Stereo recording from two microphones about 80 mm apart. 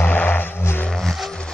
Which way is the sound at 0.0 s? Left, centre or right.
Left.